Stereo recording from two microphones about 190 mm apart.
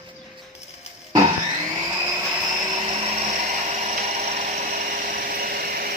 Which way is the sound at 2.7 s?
30° right (ahead or behind).